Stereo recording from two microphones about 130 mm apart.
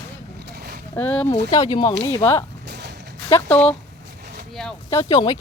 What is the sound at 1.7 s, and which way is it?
Speech, 25° left (ahead or behind).